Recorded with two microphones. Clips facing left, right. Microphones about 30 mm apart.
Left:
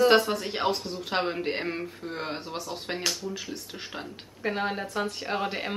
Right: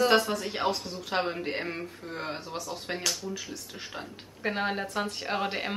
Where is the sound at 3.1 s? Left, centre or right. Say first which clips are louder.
Left 1 dB; centre.